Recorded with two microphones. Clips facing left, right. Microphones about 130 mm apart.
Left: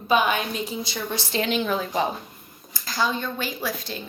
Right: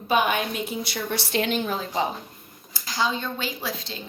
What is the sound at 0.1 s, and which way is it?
Speech, 50° right (ahead or behind).